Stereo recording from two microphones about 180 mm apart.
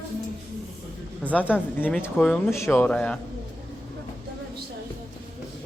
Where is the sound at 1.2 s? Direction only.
10° left (ahead or behind).